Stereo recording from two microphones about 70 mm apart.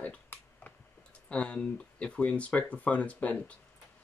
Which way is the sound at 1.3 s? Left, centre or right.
Centre.